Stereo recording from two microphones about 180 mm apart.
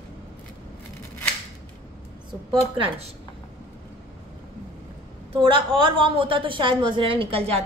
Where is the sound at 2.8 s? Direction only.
35° right (ahead or behind).